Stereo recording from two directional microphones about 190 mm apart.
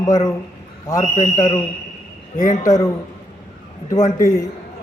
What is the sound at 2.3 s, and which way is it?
Speech, 40° left (ahead or behind).